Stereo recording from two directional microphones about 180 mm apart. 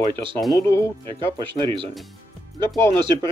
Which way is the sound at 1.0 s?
30° right (ahead or behind).